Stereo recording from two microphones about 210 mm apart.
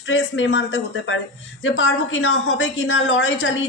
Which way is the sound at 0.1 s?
60° left (ahead or behind).